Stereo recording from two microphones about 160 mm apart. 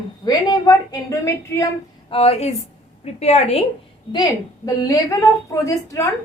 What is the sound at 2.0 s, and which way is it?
A woman's voice, 35° left (ahead or behind).